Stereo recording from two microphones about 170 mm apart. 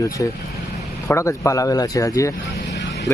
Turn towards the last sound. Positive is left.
turn(degrees=90)